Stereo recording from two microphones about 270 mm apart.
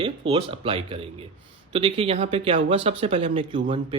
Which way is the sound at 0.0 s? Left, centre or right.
Centre.